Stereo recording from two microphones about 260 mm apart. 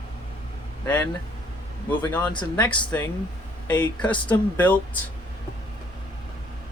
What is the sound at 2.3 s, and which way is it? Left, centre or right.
Speech, centre.